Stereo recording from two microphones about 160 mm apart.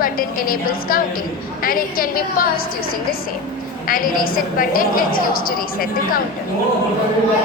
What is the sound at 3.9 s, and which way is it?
A woman's voice, 60° left (ahead or behind).